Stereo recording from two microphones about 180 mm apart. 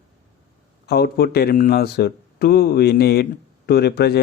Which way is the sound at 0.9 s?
60° left (ahead or behind).